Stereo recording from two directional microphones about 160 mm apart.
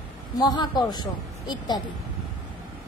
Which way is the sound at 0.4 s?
25° left (ahead or behind).